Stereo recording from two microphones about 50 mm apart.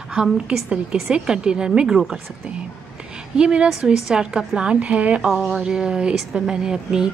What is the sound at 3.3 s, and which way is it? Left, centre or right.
A woman's voice, centre.